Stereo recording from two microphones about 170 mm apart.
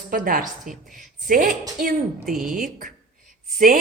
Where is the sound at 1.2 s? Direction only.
55° right (ahead or behind).